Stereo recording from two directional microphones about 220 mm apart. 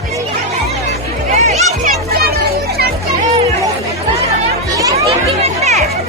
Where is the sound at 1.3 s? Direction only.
30° right (ahead or behind).